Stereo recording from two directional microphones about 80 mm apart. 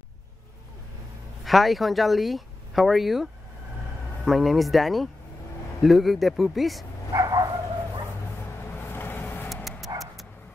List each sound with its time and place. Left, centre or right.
1.4 s speech: centre
7.1 s bow-wow: right
8.7 s vehicle: left
9.9 s dog: right